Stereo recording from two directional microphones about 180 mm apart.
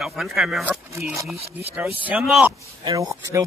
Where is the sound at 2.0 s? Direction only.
5° right (ahead or behind).